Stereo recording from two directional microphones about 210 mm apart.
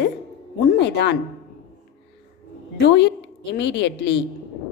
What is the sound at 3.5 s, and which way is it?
Speech, 55° left (ahead or behind).